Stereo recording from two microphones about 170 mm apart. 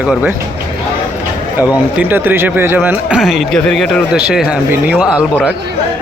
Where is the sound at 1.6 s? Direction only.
10° right (ahead or behind).